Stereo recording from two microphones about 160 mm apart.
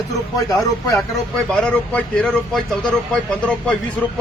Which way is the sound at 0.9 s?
5° left (ahead or behind).